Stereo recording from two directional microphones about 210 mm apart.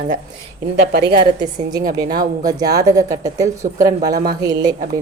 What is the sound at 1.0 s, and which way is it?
A woman's voice, 20° right (ahead or behind).